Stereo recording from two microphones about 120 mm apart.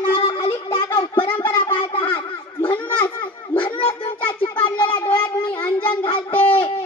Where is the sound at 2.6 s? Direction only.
15° left (ahead or behind).